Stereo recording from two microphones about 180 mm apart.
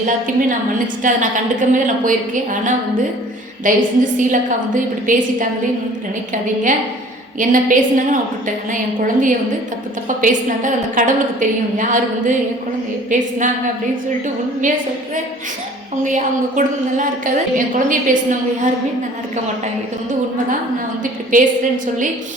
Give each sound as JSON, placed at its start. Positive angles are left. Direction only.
{"t": 0.0, "sound": "a woman's voice", "side_deg": -50}
{"t": 16.0, "sound": "a woman's voice", "side_deg": -45}
{"t": 21.0, "sound": "a woman's voice", "side_deg": -45}